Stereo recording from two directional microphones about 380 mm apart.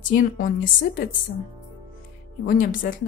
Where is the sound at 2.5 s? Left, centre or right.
Left.